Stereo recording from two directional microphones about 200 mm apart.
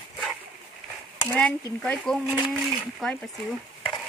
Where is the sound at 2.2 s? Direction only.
5° right (ahead or behind).